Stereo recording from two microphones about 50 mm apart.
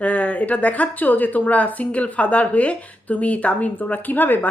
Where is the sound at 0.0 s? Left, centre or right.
Left.